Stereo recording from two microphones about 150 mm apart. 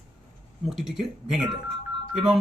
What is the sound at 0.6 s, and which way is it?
Speech, centre (ahead or behind).